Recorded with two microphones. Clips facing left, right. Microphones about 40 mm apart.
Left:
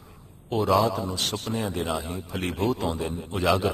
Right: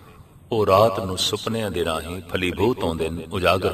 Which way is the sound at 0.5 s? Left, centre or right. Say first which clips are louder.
Right 5 dB; right.